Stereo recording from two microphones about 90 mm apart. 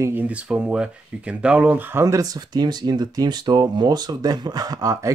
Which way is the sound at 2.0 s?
45° right (ahead or behind).